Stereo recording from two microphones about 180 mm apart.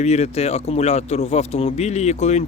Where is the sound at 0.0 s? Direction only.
35° left (ahead or behind).